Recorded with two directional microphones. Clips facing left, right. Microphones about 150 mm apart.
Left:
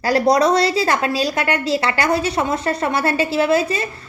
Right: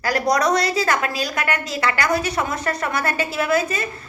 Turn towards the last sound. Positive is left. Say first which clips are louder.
# left 3 dB
turn(degrees=30)  # may be behind; listen again after turning